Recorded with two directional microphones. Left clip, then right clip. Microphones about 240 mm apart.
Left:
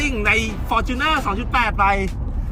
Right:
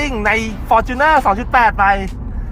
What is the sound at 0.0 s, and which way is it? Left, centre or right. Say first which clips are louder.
Speech: right 3 dB; centre.